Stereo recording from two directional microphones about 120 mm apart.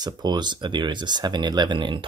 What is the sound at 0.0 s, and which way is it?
Speech, 35° right (ahead or behind).